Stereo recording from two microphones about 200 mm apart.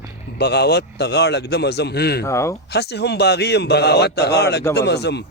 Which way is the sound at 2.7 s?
55° left (ahead or behind).